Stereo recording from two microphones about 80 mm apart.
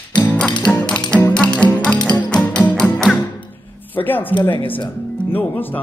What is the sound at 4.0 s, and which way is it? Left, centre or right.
Speech, left.